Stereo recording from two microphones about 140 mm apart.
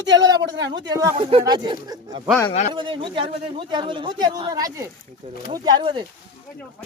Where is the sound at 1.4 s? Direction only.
30° right (ahead or behind).